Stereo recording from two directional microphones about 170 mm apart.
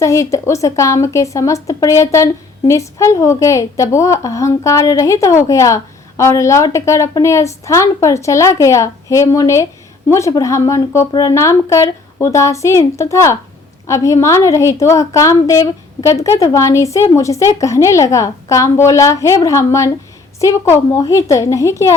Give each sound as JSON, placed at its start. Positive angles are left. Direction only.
{"t": 0.0, "sound": "a woman's voice", "side_deg": 20}